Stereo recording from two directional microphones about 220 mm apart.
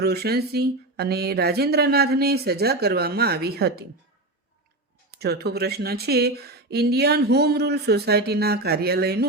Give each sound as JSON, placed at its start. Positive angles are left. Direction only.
{"t": 0.0, "sound": "speech", "side_deg": -45}
{"t": 5.1, "sound": "speech", "side_deg": -45}